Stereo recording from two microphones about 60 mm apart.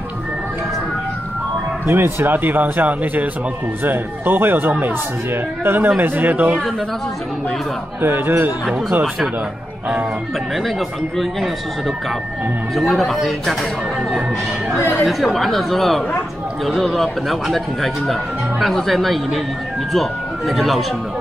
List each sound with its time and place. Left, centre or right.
1.9 s speech: right
8.0 s speech: right
12.7 s speech: centre
14.8 s speech: left
15.0 s speech: centre